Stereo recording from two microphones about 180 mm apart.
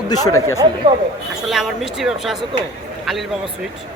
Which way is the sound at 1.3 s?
Centre (ahead or behind).